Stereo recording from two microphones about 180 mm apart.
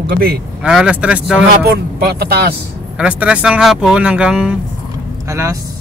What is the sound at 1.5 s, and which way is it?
Speech, 60° right (ahead or behind).